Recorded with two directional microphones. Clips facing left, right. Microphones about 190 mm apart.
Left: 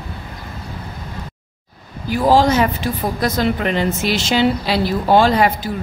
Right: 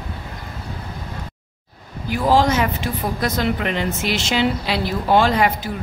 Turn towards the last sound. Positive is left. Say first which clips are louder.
# left 3 dB
turn(degrees=35)  # may be behind; listen again after turning